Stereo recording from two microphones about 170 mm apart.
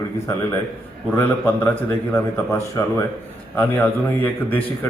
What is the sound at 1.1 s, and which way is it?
A man's voice, 15° left (ahead or behind).